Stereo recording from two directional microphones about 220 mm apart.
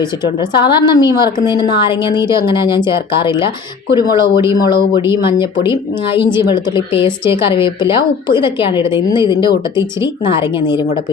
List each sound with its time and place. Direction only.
0.0 s a woman's voice: 20° left (ahead or behind)
6.2 s a woman's voice: 20° left (ahead or behind)